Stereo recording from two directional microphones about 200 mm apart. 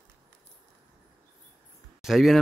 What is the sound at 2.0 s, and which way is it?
Speech, centre (ahead or behind).